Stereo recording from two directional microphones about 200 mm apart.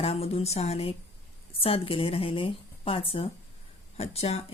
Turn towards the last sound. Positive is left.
turn(degrees=30)  # may be behind; listen again after turning